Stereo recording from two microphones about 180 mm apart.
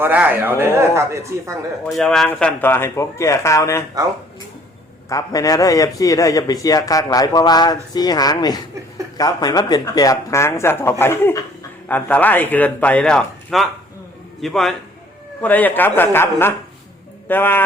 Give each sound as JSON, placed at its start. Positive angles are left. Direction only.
{"t": 0.0, "sound": "speech", "side_deg": -10}
{"t": 1.8, "sound": "speech", "side_deg": 5}
{"t": 5.0, "sound": "a man's voice", "side_deg": 20}